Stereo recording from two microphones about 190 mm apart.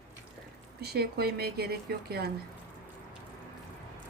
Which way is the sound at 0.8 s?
60° right (ahead or behind).